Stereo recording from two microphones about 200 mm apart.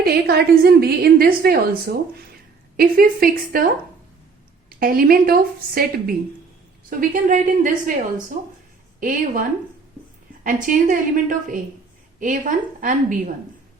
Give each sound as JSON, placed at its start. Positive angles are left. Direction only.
{"t": 0.0, "sound": "a woman's voice", "side_deg": -50}
{"t": 4.8, "sound": "a woman's voice", "side_deg": -45}
{"t": 9.0, "sound": "a woman's voice", "side_deg": -40}